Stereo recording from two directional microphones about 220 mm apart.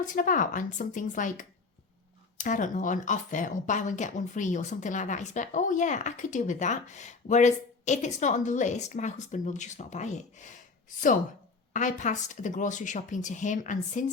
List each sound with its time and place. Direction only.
0.0 s speech: 35° left (ahead or behind)
11.7 s speech: 35° left (ahead or behind)